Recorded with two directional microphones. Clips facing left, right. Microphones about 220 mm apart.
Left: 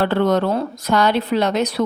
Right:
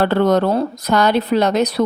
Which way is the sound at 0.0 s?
40° right (ahead or behind).